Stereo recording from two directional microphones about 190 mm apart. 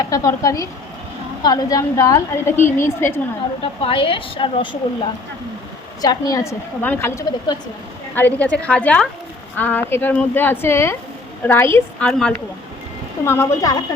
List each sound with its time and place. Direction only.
0.0 s a woman's voice: 15° left (ahead or behind)
3.6 s a woman's voice: 30° left (ahead or behind)
6.0 s a woman's voice: 20° left (ahead or behind)